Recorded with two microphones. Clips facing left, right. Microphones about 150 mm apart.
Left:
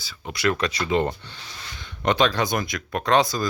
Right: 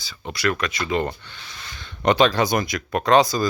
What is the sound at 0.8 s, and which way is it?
Speech, 20° left (ahead or behind).